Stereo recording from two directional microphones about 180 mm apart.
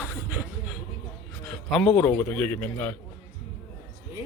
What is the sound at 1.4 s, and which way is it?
A man's voice, centre (ahead or behind).